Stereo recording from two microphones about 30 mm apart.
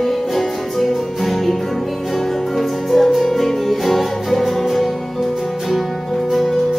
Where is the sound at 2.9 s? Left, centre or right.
Centre.